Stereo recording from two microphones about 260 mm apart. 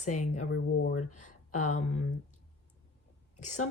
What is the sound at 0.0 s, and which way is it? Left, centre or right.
Speech, left.